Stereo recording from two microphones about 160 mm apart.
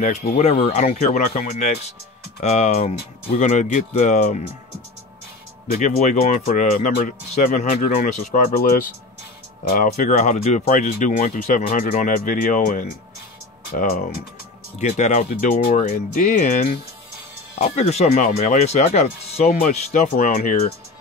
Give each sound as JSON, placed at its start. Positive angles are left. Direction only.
{"t": 0.0, "sound": "speech", "side_deg": 45}
{"t": 5.7, "sound": "speech", "side_deg": 50}
{"t": 9.7, "sound": "speech", "side_deg": 50}
{"t": 14.8, "sound": "speech", "side_deg": 45}
{"t": 20.2, "sound": "speech", "side_deg": 55}